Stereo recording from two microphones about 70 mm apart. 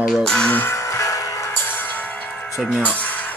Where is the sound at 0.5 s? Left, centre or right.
Left.